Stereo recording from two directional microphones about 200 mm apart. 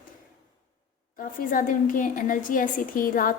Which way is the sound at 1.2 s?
45° left (ahead or behind).